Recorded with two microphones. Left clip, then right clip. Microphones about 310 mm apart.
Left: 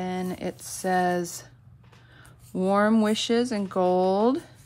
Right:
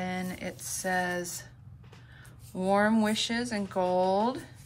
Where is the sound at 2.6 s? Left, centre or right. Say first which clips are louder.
Left 3 dB; left.